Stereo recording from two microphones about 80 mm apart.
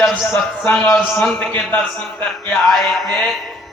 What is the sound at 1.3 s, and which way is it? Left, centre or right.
Speech, left.